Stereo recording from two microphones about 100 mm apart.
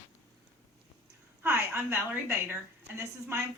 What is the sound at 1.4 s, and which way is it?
A woman's voice, 25° right (ahead or behind).